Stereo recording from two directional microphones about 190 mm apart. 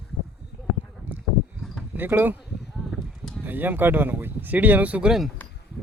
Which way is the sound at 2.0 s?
10° right (ahead or behind).